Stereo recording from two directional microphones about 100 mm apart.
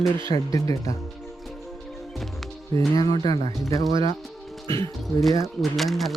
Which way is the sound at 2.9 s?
40° left (ahead or behind).